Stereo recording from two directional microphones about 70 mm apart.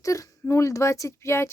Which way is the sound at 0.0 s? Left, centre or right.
Left.